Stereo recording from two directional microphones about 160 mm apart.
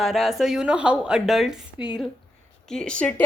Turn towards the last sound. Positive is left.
turn(degrees=5)  # may be behind; listen again after turning